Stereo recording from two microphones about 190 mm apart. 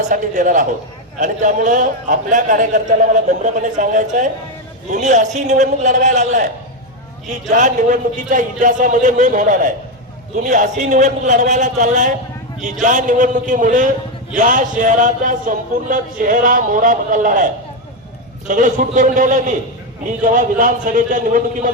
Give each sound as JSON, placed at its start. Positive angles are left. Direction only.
{"t": 0.1, "sound": "a man's voice", "side_deg": -45}